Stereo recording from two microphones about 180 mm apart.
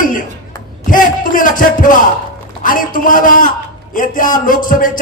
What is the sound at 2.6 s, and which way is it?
Music, 50° left (ahead or behind).